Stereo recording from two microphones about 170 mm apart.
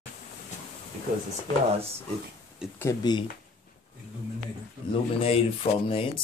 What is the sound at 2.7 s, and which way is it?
Speech, 20° left (ahead or behind).